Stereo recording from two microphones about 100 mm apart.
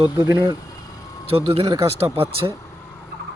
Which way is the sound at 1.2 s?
75° right (ahead or behind).